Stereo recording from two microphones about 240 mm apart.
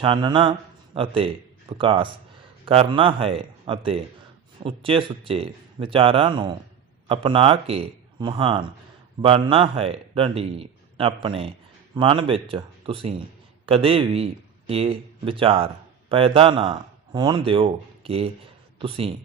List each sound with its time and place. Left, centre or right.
0.0 s a man's voice: centre